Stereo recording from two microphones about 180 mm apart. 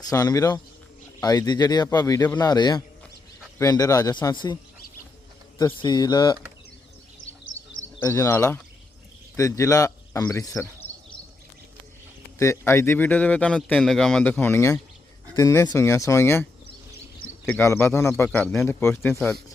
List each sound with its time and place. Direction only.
0.0 s a man's voice: 20° left (ahead or behind)
5.5 s a man's voice: 25° left (ahead or behind)
7.9 s a man's voice: 15° left (ahead or behind)
12.4 s a man's voice: 15° left (ahead or behind)